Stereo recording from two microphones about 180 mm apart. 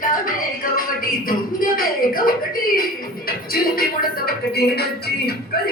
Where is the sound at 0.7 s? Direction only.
50° left (ahead or behind).